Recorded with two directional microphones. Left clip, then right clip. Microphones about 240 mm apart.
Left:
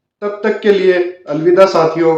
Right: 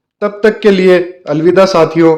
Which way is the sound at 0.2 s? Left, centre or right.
Right.